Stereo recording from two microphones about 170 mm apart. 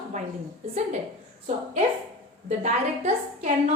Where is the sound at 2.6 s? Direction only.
40° right (ahead or behind).